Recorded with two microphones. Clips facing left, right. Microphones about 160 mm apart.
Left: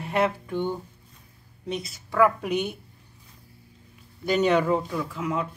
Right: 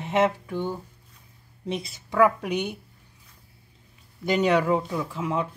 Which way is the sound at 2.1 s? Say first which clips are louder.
Even; 10° right (ahead or behind).